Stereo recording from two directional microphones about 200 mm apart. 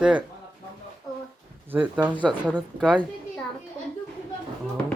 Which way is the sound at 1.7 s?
10° right (ahead or behind).